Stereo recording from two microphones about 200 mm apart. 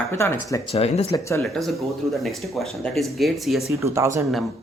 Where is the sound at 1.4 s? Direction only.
Centre (ahead or behind).